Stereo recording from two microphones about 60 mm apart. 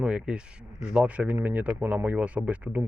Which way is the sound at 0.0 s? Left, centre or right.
Centre.